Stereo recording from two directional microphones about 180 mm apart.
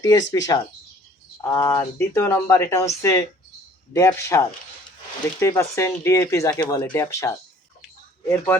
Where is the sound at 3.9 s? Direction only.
15° left (ahead or behind).